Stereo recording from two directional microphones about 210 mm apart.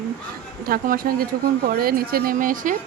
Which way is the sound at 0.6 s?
45° right (ahead or behind).